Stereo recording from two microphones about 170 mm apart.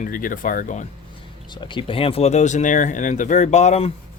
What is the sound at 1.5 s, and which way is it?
Speech, 25° left (ahead or behind).